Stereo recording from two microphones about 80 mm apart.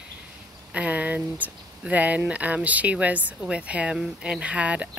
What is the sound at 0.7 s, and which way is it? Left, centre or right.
Speech, centre.